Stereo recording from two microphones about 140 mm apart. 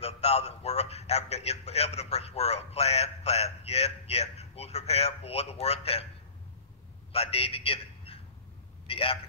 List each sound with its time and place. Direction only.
0.0 s a man's voice: 50° left (ahead or behind)
7.1 s a man's voice: 45° left (ahead or behind)